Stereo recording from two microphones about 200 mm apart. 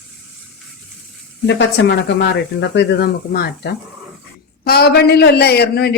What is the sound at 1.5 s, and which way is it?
A man's voice, 60° left (ahead or behind).